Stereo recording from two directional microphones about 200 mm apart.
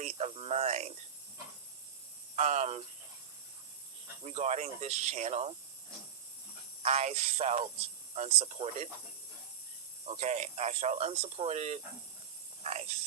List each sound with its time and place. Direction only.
0.0 s speech: 30° right (ahead or behind)
2.3 s speech: 35° right (ahead or behind)
4.2 s speech: 35° right (ahead or behind)
6.8 s speech: 35° right (ahead or behind)
10.1 s speech: 35° right (ahead or behind)